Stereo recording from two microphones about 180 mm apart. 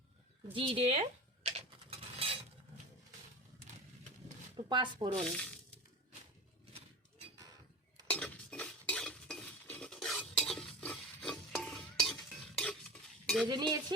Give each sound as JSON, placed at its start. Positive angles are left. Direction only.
{"t": 0.5, "sound": "speech", "side_deg": -30}
{"t": 2.1, "sound": "a sound", "side_deg": -30}
{"t": 4.5, "sound": "speech", "side_deg": -25}
{"t": 5.1, "sound": "speech", "side_deg": 5}
{"t": 8.0, "sound": "stir", "side_deg": 5}
{"t": 13.5, "sound": "cutlery", "side_deg": -25}